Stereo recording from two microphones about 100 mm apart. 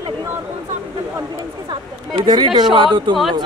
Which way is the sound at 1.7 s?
45° right (ahead or behind).